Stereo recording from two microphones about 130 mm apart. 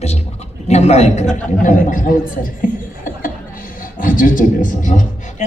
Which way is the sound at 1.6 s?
85° left.